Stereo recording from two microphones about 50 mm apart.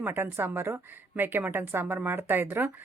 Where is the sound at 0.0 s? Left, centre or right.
Right.